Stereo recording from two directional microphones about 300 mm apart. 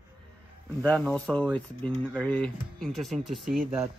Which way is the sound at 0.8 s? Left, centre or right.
Centre.